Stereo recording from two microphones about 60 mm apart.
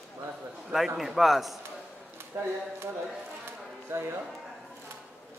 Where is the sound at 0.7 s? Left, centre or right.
Centre.